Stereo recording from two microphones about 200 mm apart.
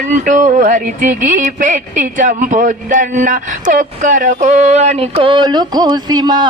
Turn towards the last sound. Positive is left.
turn(degrees=-20)  # may be behind; listen again after turning